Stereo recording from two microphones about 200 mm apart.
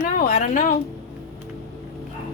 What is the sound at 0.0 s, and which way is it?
Speech, 40° left (ahead or behind).